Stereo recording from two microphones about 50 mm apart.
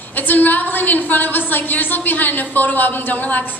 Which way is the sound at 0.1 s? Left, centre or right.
Left.